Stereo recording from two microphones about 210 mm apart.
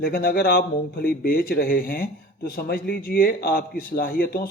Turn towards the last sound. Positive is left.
turn(degrees=45)  # may be behind; listen again after turning